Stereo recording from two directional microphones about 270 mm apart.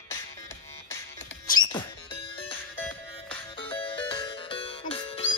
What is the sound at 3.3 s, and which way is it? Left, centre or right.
Music, centre.